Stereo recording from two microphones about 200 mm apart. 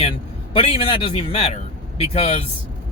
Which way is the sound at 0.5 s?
25° left (ahead or behind).